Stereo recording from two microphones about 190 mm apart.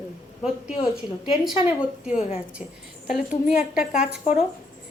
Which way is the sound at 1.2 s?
Centre (ahead or behind).